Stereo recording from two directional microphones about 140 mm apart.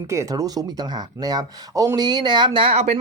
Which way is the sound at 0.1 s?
20° right (ahead or behind).